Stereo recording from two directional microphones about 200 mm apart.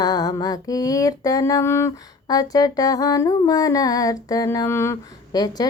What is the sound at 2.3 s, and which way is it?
Humming, 20° left (ahead or behind).